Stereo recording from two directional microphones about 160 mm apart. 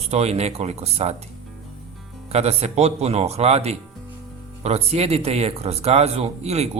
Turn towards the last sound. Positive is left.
turn(degrees=-40)  # may be behind; listen again after turning